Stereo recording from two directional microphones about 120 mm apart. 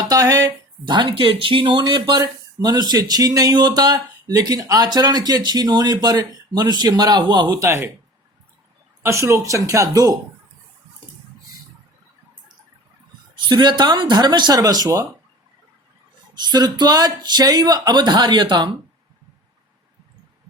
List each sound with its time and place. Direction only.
0.1 s speech: 30° right (ahead or behind)
7.6 s speech: 20° right (ahead or behind)
9.0 s speech: 25° right (ahead or behind)
13.3 s speech: 40° right (ahead or behind)
16.3 s speech: 35° right (ahead or behind)